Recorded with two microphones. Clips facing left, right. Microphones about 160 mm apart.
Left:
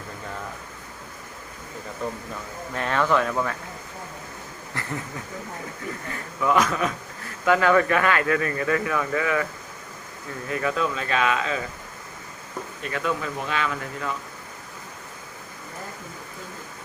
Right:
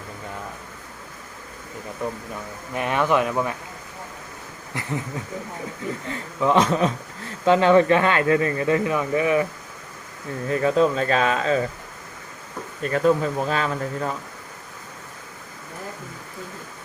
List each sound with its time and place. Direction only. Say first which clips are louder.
2.7 s speech: right 2 dB; 15° right (ahead or behind)
4.7 s a sound: right 3 dB; 15° right (ahead or behind)
6.1 s speech: right 2 dB; 25° right (ahead or behind)
10.5 s speech: right 6 dB; 30° right (ahead or behind)
12.8 s speech: right 8 dB; 40° right (ahead or behind)